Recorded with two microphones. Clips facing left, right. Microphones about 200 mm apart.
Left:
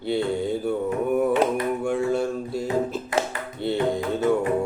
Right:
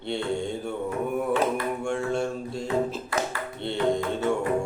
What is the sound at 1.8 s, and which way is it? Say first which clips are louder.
Music: left 3 dB; 5° left (ahead or behind).